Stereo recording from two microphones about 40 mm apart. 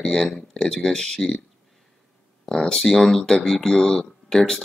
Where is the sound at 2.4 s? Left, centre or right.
Centre.